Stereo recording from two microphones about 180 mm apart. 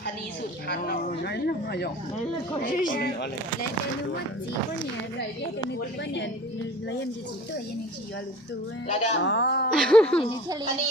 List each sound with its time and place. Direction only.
0.7 s speech: 65° left (ahead or behind)
2.6 s speech: 50° left (ahead or behind)
8.9 s speech: 40° left (ahead or behind)
9.2 s speech: 85° left
9.7 s speech: 5° left (ahead or behind)